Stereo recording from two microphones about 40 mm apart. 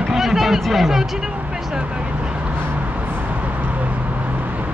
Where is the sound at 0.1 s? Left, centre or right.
Centre.